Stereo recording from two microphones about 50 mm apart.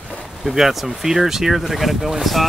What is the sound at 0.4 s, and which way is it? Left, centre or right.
Speech, centre.